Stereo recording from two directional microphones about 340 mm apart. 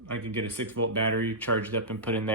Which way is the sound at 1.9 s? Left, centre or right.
Centre.